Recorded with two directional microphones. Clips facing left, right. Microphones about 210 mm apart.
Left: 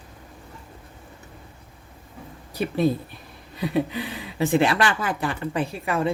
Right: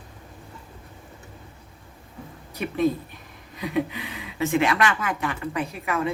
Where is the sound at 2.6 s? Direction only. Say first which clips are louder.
Left 1 dB; 35° left (ahead or behind).